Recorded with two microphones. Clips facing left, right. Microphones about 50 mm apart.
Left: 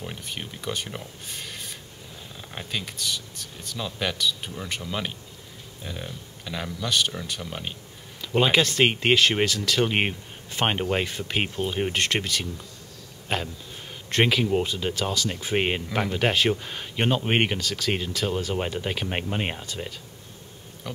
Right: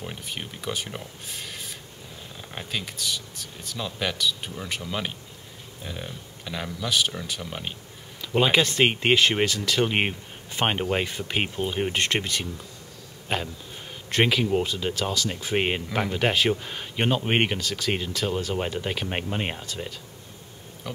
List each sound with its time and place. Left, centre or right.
0.0 s speech: centre
8.2 s a sound: centre
8.8 s speech: centre
19.6 s speech: centre
20.9 s pig: centre